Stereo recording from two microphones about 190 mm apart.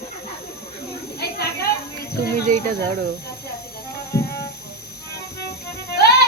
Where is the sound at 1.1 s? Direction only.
55° left (ahead or behind).